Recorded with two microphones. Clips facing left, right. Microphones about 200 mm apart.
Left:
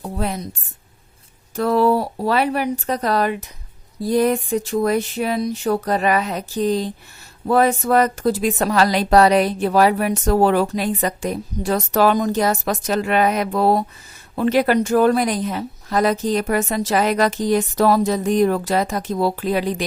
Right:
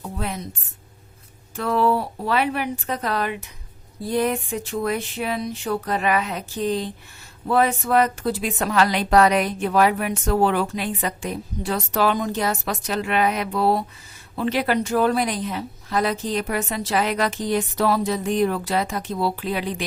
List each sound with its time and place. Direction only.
0.0 s speech: 35° left (ahead or behind)
1.5 s a woman's voice: 40° left (ahead or behind)